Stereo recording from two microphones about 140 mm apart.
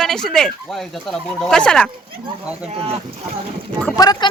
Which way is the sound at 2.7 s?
45° right (ahead or behind).